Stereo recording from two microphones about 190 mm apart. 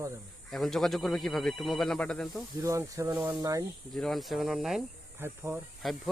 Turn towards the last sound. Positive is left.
turn(degrees=0)  # may be behind; listen again after turning